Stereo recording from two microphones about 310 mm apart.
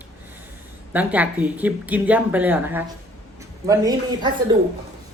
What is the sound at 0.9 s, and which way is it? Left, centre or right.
A man's voice, centre.